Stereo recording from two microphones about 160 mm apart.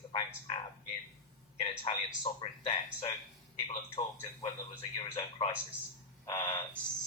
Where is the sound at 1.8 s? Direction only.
30° left (ahead or behind).